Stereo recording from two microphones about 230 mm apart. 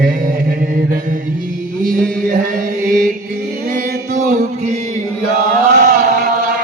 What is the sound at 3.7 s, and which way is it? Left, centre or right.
Mantra, right.